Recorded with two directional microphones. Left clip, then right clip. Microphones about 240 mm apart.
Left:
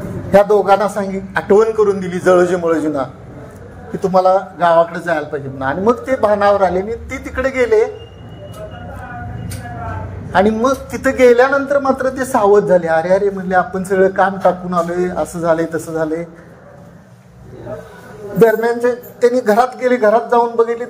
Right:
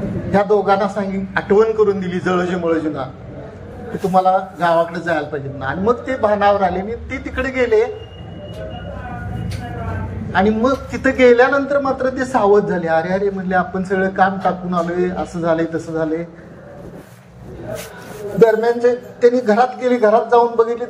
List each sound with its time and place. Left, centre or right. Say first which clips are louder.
0.3 s a man's voice: left 4 dB; left
4.1 s a man's voice: left 2 dB; left
10.3 s a man's voice: left 3 dB; left
18.4 s a man's voice: left 1 dB; left